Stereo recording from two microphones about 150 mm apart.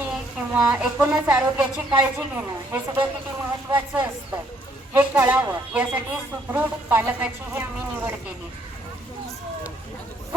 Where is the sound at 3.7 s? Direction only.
15° right (ahead or behind).